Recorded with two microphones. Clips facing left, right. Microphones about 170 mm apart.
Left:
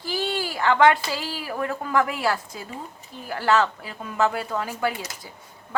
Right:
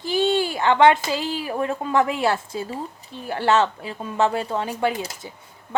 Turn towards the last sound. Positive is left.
turn(degrees=-25)  # may be behind; listen again after turning